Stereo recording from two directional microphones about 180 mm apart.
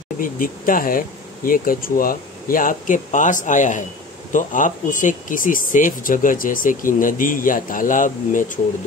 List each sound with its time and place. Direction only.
0.2 s speech: 50° left (ahead or behind)